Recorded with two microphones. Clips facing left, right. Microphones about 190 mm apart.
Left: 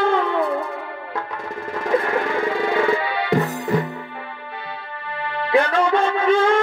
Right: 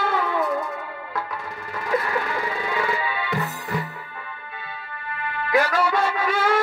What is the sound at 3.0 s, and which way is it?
Music, 75° left (ahead or behind).